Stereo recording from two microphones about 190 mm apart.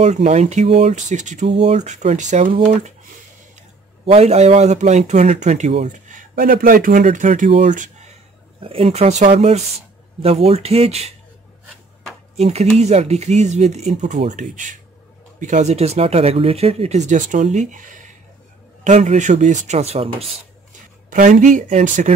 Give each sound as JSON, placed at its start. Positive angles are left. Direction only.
{"t": 0.0, "sound": "a man's voice", "side_deg": -35}
{"t": 4.0, "sound": "a man's voice", "side_deg": -30}
{"t": 12.4, "sound": "a man's voice", "side_deg": -35}
{"t": 21.1, "sound": "a man's voice", "side_deg": -40}